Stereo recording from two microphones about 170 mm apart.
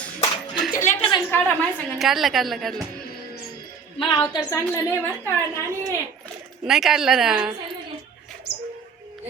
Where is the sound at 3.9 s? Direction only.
25° left (ahead or behind).